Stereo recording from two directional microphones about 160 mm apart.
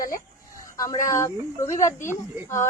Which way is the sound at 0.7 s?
20° left (ahead or behind).